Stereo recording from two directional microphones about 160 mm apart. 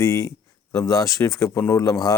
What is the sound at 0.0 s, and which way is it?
Speech, 20° left (ahead or behind).